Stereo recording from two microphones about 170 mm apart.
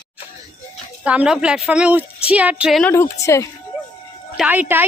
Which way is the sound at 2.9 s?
15° left (ahead or behind).